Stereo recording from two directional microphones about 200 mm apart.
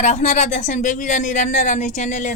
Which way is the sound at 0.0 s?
35° left (ahead or behind).